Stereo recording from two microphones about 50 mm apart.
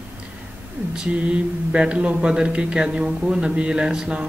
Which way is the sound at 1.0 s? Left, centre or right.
Right.